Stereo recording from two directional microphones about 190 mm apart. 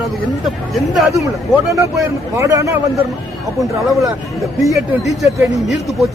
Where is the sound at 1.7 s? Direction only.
15° right (ahead or behind).